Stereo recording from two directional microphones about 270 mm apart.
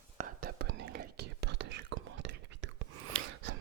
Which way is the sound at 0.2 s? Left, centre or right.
Right.